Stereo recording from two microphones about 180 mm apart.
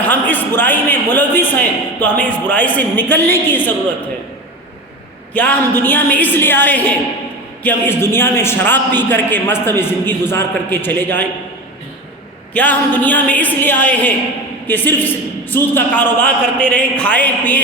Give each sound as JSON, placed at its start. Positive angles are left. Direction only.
{"t": 0.0, "sound": "a man's voice", "side_deg": 10}
{"t": 5.3, "sound": "a man's voice", "side_deg": 10}
{"t": 12.5, "sound": "a man's voice", "side_deg": 10}